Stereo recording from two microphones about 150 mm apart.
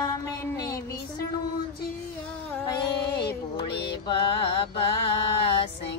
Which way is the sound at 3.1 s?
90° left.